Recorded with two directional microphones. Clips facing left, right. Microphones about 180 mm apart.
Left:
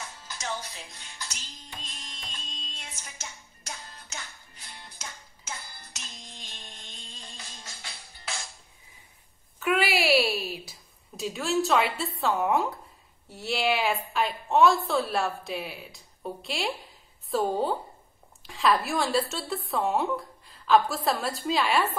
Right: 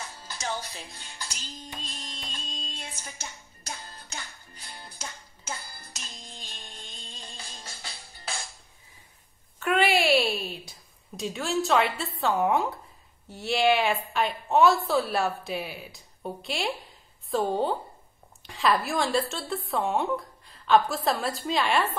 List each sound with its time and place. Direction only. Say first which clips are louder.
0.9 s music: right 1 dB; 30° right (ahead or behind)
9.6 s a sound: right 2 dB; 5° left (ahead or behind)
12.2 s a woman's voice: right 1 dB; centre (ahead or behind)